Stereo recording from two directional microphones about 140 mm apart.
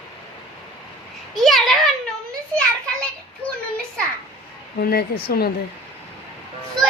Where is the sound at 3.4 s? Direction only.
10° left (ahead or behind).